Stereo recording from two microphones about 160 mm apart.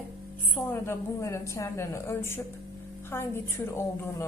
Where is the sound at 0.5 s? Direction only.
15° left (ahead or behind).